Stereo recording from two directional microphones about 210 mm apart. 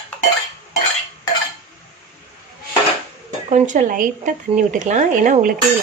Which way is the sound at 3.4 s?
35° right (ahead or behind).